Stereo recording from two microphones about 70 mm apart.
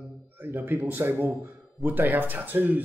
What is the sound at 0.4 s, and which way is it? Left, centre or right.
Speech, right.